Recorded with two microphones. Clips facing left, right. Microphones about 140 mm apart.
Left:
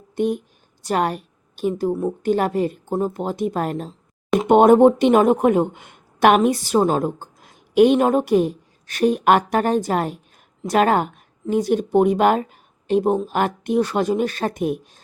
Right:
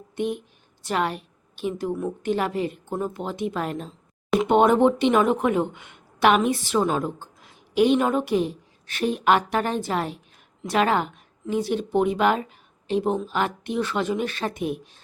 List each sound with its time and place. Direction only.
0.2 s a woman's voice: 40° left (ahead or behind)